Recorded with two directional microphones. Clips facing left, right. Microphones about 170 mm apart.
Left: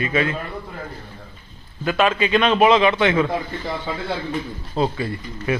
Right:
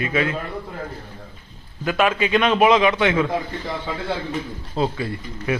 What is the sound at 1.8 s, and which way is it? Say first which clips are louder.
A man's voice: left 1 dB; 15° right (ahead or behind).